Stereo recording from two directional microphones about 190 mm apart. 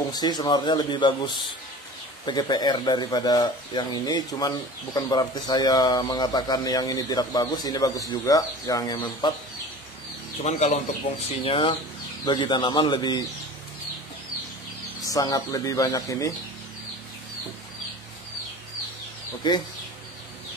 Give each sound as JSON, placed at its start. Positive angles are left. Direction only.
{"t": 0.1, "sound": "speech", "side_deg": 20}
{"t": 10.4, "sound": "speech", "side_deg": 40}
{"t": 15.0, "sound": "speech", "side_deg": 20}